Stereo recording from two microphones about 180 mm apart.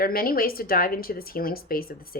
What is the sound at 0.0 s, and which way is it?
Speech, 55° left (ahead or behind).